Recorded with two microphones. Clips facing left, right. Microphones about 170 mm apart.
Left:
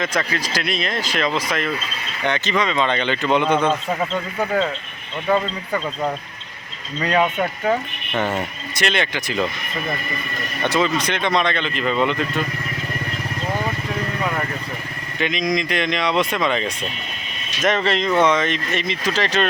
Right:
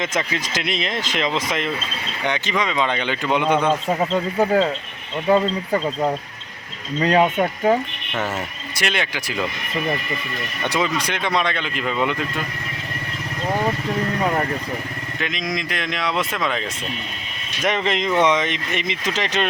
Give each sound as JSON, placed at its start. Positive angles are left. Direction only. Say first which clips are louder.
{"t": 0.0, "sound": "speech", "louder": "left 1 dB", "side_deg": -20}
{"t": 5.3, "sound": "speech", "louder": "right 3 dB", "side_deg": -30}
{"t": 7.0, "sound": "speech", "louder": "right 2 dB", "side_deg": -30}
{"t": 8.2, "sound": "speech", "louder": "left 3 dB", "side_deg": -5}
{"t": 10.7, "sound": "speech", "louder": "left 3 dB", "side_deg": -15}
{"t": 15.2, "sound": "speech", "louder": "left 6 dB", "side_deg": 0}
{"t": 17.6, "sound": "speech", "louder": "left 2 dB", "side_deg": -15}